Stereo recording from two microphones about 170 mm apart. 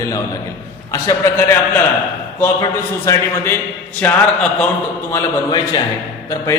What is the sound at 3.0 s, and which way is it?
A man's voice, 15° left (ahead or behind).